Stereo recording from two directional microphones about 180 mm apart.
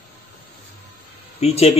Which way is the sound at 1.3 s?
35° left (ahead or behind).